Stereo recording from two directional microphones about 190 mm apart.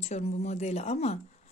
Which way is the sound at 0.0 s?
35° left (ahead or behind).